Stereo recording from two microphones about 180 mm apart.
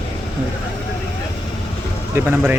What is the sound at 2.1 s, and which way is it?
Speech, 10° right (ahead or behind).